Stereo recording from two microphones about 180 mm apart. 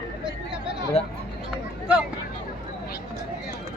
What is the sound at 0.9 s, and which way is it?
Speech, 35° left (ahead or behind).